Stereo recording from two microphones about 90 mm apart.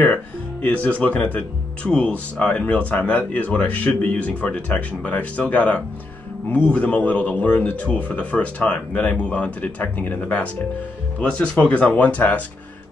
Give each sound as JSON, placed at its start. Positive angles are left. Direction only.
{"t": 0.0, "sound": "speech", "side_deg": 15}